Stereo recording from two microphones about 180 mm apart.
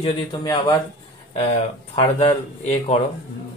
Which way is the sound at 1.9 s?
35° left (ahead or behind).